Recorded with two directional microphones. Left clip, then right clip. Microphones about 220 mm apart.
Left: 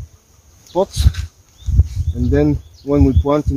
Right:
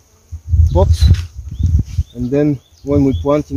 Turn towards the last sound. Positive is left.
turn(degrees=-15)  # may be behind; listen again after turning